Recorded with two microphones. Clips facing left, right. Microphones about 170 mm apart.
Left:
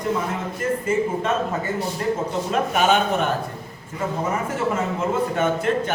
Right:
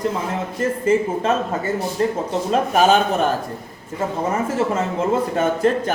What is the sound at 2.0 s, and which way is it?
Speech, 30° right (ahead or behind).